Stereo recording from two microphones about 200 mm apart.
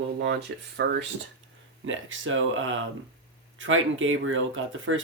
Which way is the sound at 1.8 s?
75° right (ahead or behind).